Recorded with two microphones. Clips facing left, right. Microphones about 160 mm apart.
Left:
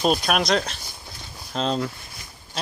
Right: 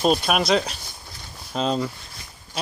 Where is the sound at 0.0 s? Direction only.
Centre (ahead or behind).